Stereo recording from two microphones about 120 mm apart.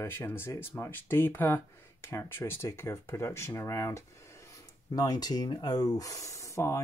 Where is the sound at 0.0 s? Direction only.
20° left (ahead or behind).